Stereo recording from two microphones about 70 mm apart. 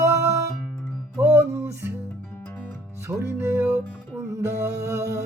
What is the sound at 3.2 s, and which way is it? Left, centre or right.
Music, right.